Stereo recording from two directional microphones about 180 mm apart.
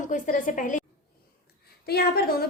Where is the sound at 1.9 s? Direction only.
60° left (ahead or behind).